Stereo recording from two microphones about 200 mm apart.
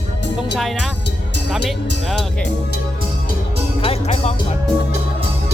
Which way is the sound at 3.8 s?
30° left (ahead or behind).